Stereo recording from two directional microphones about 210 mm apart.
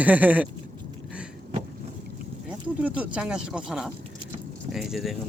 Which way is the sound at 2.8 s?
5° right (ahead or behind).